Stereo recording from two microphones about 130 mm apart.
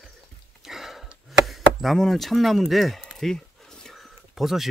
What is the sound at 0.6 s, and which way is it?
Chopping, centre (ahead or behind).